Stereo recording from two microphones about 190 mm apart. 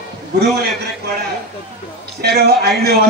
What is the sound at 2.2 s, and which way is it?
Speech, 55° right (ahead or behind).